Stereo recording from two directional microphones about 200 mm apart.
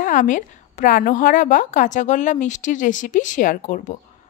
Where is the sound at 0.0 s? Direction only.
40° left (ahead or behind).